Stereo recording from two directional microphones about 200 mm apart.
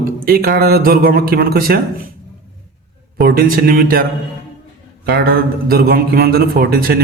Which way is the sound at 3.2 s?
45° right (ahead or behind).